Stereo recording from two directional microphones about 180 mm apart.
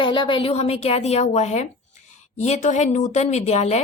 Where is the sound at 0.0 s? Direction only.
30° left (ahead or behind).